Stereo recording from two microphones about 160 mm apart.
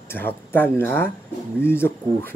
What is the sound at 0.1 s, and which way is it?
Speech, 15° left (ahead or behind).